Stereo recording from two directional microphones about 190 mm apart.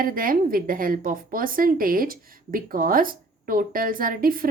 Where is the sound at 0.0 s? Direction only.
50° right (ahead or behind).